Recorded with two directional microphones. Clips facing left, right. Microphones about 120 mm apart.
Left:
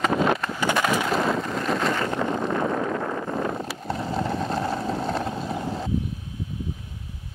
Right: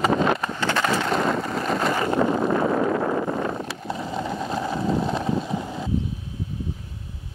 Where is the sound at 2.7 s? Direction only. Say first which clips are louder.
Right 4 dB; 30° right (ahead or behind).